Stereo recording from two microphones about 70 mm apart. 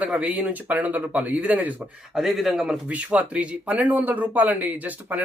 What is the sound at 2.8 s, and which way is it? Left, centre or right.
Speech, centre.